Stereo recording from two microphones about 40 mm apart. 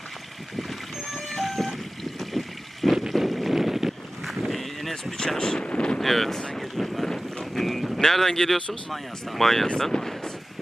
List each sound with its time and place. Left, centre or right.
0.5 s boat: centre
4.3 s vehicle: centre
5.4 s speech: left
6.0 s speech: centre
8.9 s speech: centre